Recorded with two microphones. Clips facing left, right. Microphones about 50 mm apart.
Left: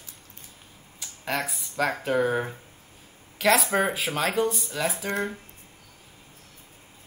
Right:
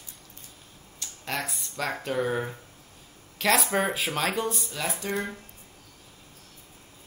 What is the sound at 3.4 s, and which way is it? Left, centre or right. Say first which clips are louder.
Speech: left 2 dB; centre.